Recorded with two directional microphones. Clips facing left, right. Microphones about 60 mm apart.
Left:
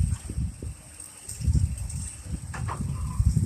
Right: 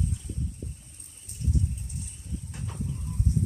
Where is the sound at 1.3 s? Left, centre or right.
Left.